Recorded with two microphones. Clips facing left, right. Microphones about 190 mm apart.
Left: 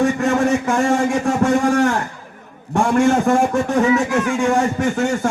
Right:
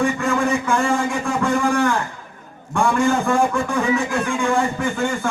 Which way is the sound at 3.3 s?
45° left (ahead or behind).